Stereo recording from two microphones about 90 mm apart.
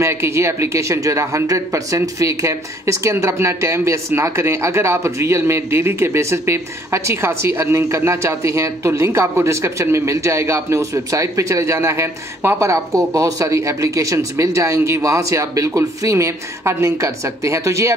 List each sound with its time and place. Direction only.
0.0 s speech: 30° right (ahead or behind)